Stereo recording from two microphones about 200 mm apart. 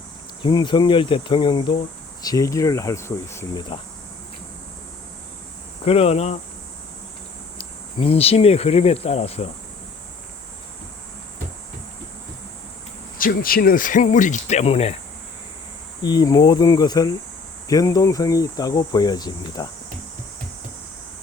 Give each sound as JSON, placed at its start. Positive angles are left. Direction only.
{"t": 0.4, "sound": "cricket", "side_deg": 25}
{"t": 2.2, "sound": "speech", "side_deg": 15}
{"t": 5.8, "sound": "speech", "side_deg": 30}
{"t": 7.6, "sound": "speech", "side_deg": 25}
{"t": 13.1, "sound": "speech", "side_deg": 45}
{"t": 16.0, "sound": "cricket", "side_deg": 20}
{"t": 17.7, "sound": "speech", "side_deg": 20}